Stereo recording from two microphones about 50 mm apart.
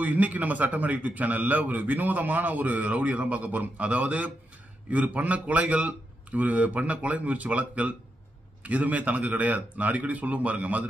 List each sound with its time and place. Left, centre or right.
0.0 s a man's voice: right